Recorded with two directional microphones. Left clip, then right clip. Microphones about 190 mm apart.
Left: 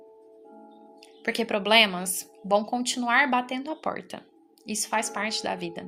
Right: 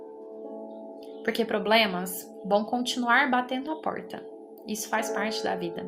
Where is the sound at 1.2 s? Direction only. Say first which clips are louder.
Even; 25° left (ahead or behind).